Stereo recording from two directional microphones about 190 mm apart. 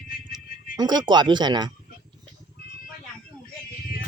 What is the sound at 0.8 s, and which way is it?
Speech, 20° right (ahead or behind).